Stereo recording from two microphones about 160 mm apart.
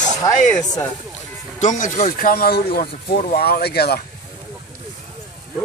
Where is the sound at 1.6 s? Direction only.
50° left (ahead or behind); by 4.0 s 85° left.